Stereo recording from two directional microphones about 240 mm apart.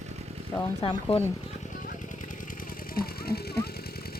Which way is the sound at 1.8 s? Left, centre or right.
Left.